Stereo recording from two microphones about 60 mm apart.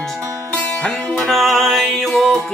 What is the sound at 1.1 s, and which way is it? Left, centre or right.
Music, centre.